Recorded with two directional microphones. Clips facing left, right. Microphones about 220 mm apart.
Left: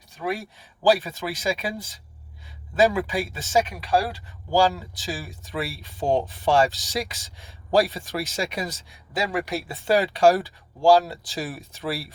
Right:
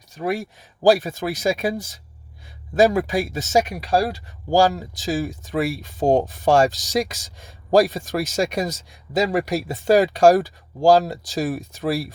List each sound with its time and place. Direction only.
0.2 s speech: 45° right (ahead or behind)